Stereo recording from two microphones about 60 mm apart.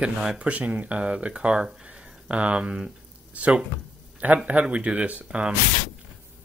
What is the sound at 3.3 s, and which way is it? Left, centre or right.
Speech, right.